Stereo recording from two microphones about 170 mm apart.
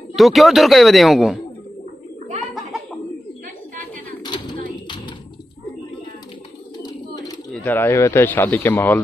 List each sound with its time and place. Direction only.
0.1 s speech: centre (ahead or behind)
4.2 s a sound: 25° left (ahead or behind)
6.8 s bird: 20° left (ahead or behind)
7.5 s speech: 10° left (ahead or behind)